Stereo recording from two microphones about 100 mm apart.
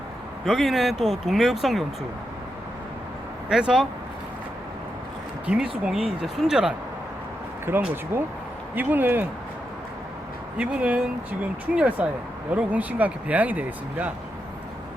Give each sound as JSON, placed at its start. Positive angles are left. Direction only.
{"t": 0.4, "sound": "speech", "side_deg": 0}
{"t": 3.5, "sound": "speech", "side_deg": -5}
{"t": 5.5, "sound": "speech", "side_deg": -10}
{"t": 7.7, "sound": "speech", "side_deg": -20}
{"t": 10.6, "sound": "speech", "side_deg": -15}